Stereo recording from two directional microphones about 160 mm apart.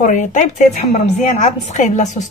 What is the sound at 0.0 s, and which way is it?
A woman's voice, 50° left (ahead or behind).